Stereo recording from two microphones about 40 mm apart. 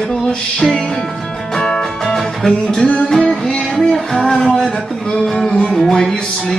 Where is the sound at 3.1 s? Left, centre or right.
Centre.